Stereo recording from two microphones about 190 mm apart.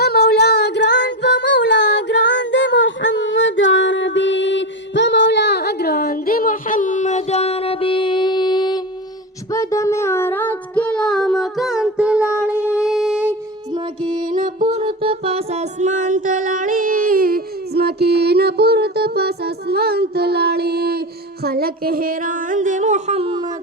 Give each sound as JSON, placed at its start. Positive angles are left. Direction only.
{"t": 0.0, "sound": "child singing", "side_deg": 55}
{"t": 12.7, "sound": "music", "side_deg": -5}
{"t": 13.7, "sound": "music", "side_deg": -25}
{"t": 14.3, "sound": "music", "side_deg": -45}
{"t": 14.7, "sound": "music", "side_deg": -30}